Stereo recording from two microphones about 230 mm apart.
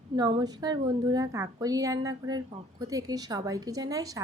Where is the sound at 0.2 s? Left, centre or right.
Centre.